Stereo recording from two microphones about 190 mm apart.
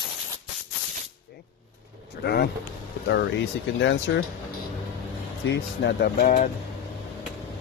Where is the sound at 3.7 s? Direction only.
75° left (ahead or behind).